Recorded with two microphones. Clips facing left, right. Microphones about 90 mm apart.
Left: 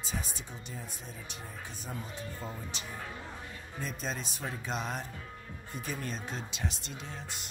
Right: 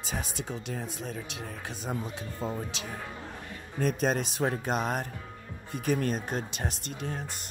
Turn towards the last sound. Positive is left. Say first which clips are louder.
# right 7 dB
turn(degrees=-50)  # may be behind; listen again after turning